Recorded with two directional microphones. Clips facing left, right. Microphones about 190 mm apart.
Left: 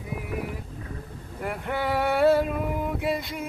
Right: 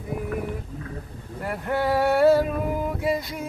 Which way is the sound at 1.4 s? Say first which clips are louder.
Right 3 dB; centre (ahead or behind).